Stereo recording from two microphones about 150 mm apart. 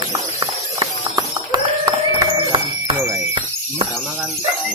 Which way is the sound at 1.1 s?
25° right (ahead or behind).